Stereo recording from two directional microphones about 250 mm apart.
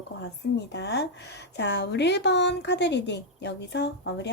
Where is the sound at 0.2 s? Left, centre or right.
Left.